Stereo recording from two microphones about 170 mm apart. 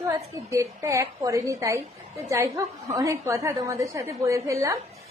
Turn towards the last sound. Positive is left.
turn(degrees=-20)  # may be behind; listen again after turning